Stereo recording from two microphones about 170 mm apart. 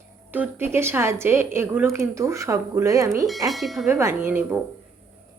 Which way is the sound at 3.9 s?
15° right (ahead or behind).